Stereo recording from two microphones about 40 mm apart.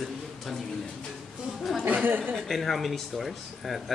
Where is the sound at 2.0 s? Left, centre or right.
Right.